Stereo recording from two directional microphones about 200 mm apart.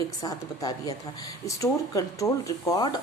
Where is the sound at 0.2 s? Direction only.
20° left (ahead or behind).